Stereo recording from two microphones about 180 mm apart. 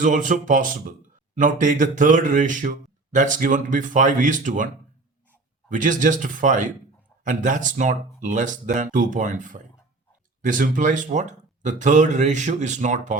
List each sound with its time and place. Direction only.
0.0 s speech: 45° right (ahead or behind)